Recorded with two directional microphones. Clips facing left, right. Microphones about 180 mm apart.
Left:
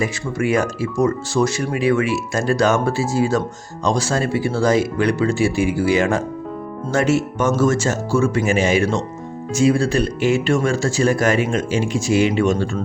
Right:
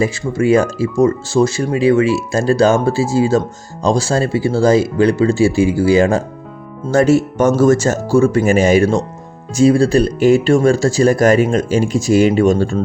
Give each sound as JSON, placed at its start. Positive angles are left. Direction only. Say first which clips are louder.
{"t": 0.0, "sound": "speech", "louder": "right 5 dB", "side_deg": -30}